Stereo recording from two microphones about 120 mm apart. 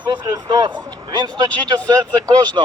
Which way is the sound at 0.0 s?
40° right (ahead or behind).